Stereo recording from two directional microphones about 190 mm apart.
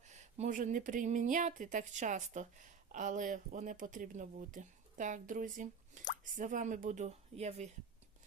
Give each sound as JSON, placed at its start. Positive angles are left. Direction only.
{"t": 0.0, "sound": "speech", "side_deg": -40}